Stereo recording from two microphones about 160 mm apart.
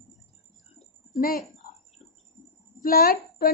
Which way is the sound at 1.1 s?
60° left (ahead or behind).